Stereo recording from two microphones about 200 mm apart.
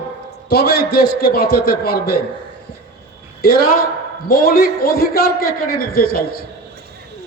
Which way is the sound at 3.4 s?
50° left (ahead or behind).